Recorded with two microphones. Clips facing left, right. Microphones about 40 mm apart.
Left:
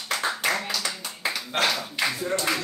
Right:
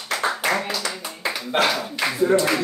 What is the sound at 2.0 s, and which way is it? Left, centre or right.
Speech, centre.